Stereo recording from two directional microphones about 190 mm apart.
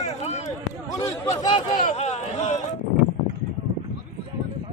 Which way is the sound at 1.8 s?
35° left (ahead or behind).